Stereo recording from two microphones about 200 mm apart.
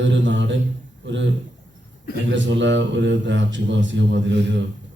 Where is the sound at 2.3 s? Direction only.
65° right (ahead or behind).